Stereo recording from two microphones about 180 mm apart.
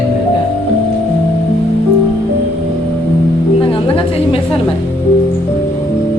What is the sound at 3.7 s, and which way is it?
Speech, 30° left (ahead or behind).